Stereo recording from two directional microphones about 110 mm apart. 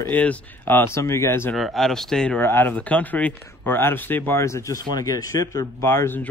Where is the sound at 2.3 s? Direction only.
20° left (ahead or behind).